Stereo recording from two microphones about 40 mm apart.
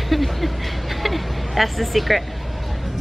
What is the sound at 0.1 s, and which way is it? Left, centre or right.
Speech, centre.